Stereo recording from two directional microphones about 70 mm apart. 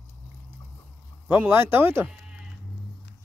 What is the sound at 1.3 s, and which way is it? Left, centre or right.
Speech, right.